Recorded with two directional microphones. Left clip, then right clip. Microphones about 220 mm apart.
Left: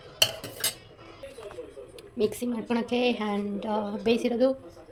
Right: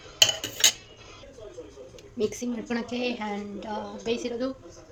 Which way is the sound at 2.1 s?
15° left (ahead or behind).